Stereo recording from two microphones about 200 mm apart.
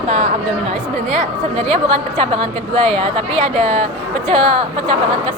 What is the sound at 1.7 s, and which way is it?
A woman's voice, 25° right (ahead or behind).